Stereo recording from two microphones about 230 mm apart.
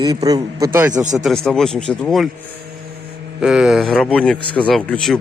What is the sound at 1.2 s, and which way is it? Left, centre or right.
A man's voice, centre.